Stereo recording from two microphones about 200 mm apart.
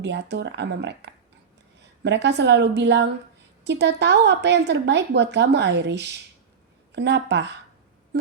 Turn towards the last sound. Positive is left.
turn(degrees=-60)  # may be behind; listen again after turning